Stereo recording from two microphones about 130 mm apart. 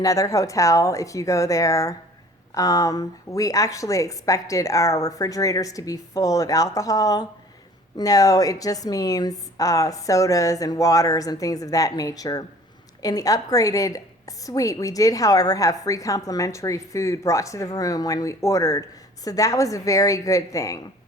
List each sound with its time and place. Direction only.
0.0 s a woman's voice: 25° left (ahead or behind)